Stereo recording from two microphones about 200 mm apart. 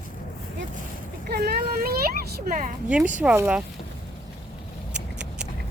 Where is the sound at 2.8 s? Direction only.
5° right (ahead or behind).